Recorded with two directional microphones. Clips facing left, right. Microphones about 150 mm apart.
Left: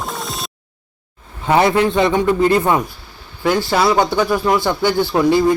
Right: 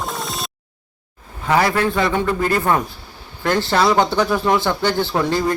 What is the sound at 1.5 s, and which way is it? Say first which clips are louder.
Speech: left 3 dB; 25° left (ahead or behind).